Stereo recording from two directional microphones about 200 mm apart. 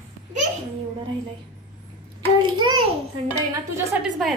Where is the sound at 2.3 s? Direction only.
25° right (ahead or behind).